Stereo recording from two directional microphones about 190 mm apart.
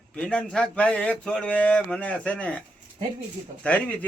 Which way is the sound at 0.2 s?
5° left (ahead or behind).